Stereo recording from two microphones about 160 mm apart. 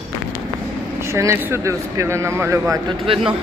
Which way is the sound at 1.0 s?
15° right (ahead or behind).